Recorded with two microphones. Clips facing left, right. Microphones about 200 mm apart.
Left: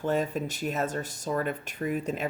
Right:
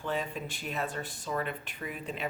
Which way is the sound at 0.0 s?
45° left (ahead or behind).